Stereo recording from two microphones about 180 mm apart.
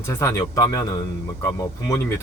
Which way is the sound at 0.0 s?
15° left (ahead or behind).